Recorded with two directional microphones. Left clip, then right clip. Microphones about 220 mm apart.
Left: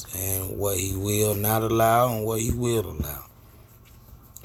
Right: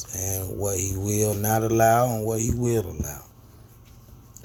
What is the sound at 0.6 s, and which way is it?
Speech, 20° left (ahead or behind).